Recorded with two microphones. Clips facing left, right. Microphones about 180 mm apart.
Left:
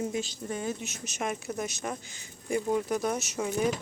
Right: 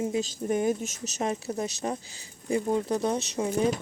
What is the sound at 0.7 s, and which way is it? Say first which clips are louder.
A woman's voice: right 7 dB; 45° right (ahead or behind).